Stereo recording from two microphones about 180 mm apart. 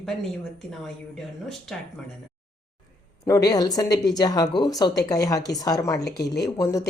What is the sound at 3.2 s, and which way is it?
Speech, 20° left (ahead or behind).